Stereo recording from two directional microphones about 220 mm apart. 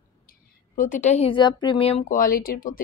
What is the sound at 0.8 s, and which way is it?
Speech, 35° left (ahead or behind).